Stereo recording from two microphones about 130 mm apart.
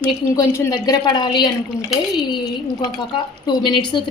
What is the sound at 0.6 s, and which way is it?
A woman's voice, 30° left (ahead or behind).